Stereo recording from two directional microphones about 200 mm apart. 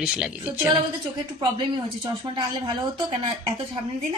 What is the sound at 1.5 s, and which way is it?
Speech, 25° right (ahead or behind).